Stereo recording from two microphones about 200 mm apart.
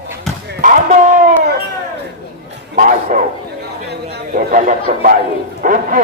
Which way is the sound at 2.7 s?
40° right (ahead or behind).